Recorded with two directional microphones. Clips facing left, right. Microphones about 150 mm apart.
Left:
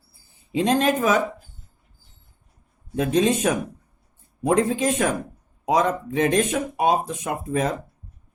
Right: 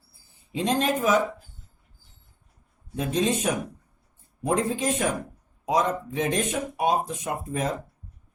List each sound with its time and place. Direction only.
0.5 s speech: 70° left (ahead or behind)
2.9 s speech: 65° left (ahead or behind)
4.4 s speech: 85° left